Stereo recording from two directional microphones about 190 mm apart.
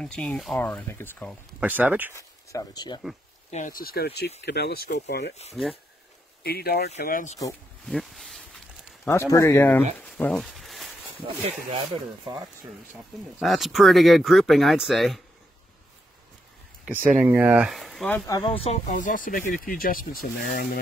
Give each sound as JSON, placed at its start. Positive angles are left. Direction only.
{"t": 0.0, "sound": "speech", "side_deg": 5}
{"t": 1.6, "sound": "speech", "side_deg": -10}
{"t": 2.1, "sound": "speech", "side_deg": 20}
{"t": 3.4, "sound": "speech", "side_deg": 40}
{"t": 6.4, "sound": "speech", "side_deg": 55}
{"t": 7.0, "sound": "speech", "side_deg": 45}
{"t": 7.9, "sound": "snake", "side_deg": 0}
{"t": 9.3, "sound": "speech", "side_deg": 15}
{"t": 13.4, "sound": "speech", "side_deg": 0}
{"t": 16.8, "sound": "speech", "side_deg": -5}
{"t": 18.6, "sound": "speech", "side_deg": 35}